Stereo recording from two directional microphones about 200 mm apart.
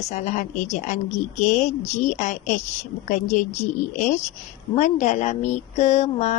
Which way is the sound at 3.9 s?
40° left (ahead or behind).